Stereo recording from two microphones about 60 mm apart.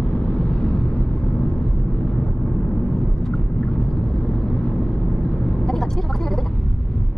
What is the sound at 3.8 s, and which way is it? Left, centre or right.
Vehicle, centre.